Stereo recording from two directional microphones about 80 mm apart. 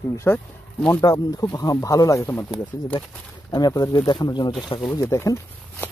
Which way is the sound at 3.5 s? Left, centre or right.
Left.